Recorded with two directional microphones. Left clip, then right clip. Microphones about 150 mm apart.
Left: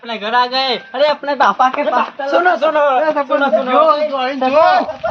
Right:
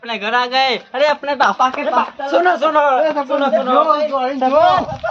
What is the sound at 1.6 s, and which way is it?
Speech, 40° left (ahead or behind).